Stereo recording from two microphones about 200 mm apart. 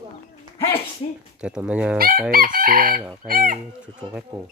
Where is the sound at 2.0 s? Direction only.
45° right (ahead or behind).